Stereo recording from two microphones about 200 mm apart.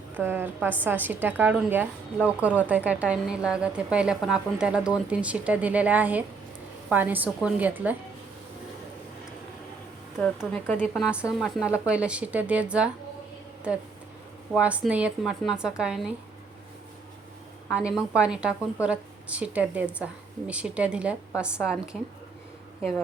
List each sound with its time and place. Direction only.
0.1 s a woman's voice: 10° right (ahead or behind)
10.2 s a woman's voice: 5° left (ahead or behind)
14.5 s a woman's voice: 5° right (ahead or behind)
17.7 s a woman's voice: 5° right (ahead or behind)